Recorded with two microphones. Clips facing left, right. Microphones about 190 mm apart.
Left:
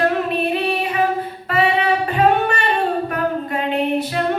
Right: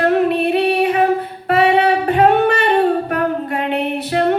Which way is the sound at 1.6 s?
65° right (ahead or behind).